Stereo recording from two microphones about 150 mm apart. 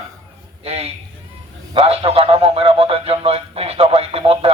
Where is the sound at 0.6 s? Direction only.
45° right (ahead or behind).